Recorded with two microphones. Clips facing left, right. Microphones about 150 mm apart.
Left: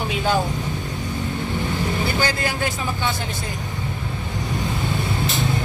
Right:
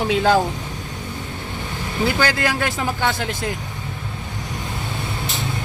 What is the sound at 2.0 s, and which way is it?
Speech, 90° right.